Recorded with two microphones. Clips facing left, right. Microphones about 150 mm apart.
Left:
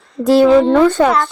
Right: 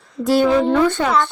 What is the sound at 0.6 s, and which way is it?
Speech, 55° left (ahead or behind).